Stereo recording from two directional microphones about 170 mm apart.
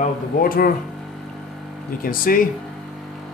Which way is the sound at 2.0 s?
55° left (ahead or behind).